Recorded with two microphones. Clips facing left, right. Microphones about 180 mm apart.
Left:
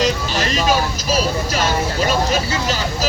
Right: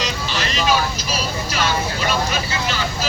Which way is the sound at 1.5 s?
40° left (ahead or behind).